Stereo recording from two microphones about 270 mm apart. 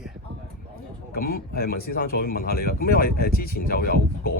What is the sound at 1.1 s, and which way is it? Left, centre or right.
Speech, left.